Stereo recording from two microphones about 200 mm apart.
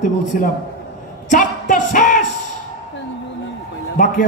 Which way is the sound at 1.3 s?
40° left (ahead or behind).